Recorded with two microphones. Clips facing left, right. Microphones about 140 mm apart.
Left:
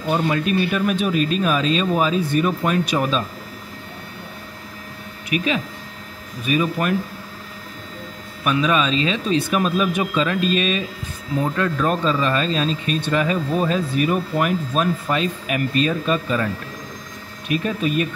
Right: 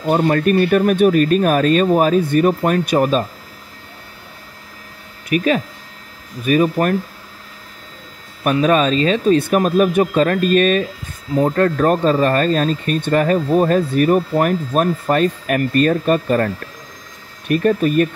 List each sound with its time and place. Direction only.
0.1 s speech: 50° right (ahead or behind)
5.3 s speech: 45° right (ahead or behind)
8.5 s speech: 45° right (ahead or behind)
17.5 s speech: 55° right (ahead or behind)